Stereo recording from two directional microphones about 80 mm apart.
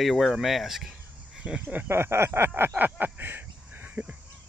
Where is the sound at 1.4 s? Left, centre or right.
Centre.